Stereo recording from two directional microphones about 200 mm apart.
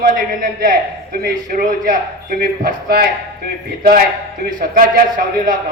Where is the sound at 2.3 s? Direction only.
50° right (ahead or behind).